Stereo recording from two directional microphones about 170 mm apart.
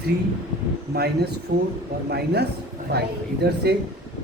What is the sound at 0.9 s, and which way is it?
Speech, 70° right (ahead or behind).